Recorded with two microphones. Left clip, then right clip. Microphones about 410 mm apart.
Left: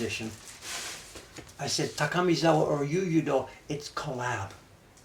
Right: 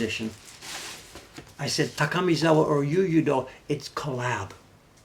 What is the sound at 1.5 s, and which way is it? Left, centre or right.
Speech, right.